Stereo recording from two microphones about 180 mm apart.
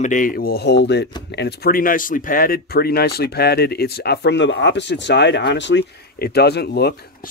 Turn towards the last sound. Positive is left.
turn(degrees=60)  # may be behind; listen again after turning